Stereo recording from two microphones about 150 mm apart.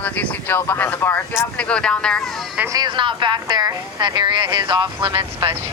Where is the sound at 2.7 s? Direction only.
30° right (ahead or behind).